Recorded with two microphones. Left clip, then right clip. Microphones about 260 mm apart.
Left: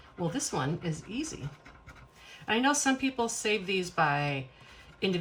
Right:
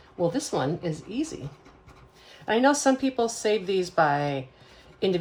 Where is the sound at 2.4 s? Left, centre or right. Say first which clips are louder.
Right 6 dB; centre.